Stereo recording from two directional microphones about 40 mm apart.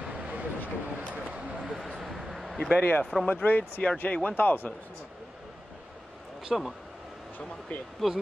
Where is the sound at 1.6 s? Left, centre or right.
Centre.